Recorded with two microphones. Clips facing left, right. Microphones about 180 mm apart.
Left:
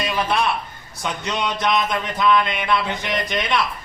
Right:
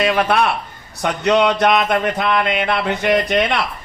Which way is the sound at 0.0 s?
65° right (ahead or behind).